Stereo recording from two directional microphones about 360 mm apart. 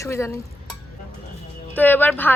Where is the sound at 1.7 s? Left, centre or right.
Centre.